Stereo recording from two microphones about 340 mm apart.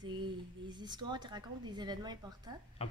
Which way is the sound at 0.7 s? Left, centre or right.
Centre.